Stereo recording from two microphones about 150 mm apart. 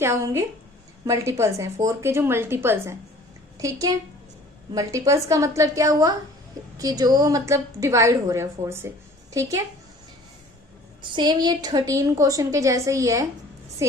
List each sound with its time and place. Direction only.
0.0 s a woman's voice: 20° right (ahead or behind)
11.0 s a woman's voice: 30° right (ahead or behind)